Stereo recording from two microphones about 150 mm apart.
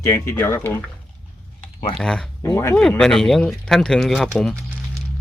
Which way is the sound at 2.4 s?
20° left (ahead or behind).